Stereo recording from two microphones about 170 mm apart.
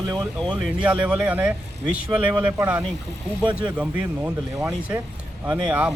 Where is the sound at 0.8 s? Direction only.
5° right (ahead or behind).